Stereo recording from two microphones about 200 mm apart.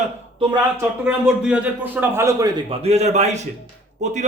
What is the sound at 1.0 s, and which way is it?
A man's voice, 5° right (ahead or behind).